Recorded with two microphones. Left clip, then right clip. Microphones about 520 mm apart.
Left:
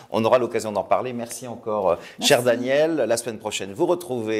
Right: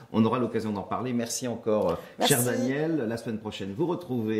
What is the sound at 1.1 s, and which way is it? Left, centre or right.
Speech, left.